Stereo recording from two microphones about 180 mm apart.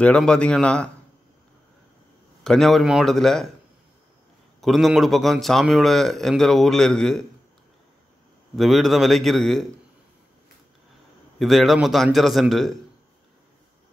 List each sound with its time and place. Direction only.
0.0 s speech: 5° left (ahead or behind)
2.4 s speech: centre (ahead or behind)
4.6 s speech: centre (ahead or behind)
8.5 s speech: centre (ahead or behind)
11.3 s speech: centre (ahead or behind)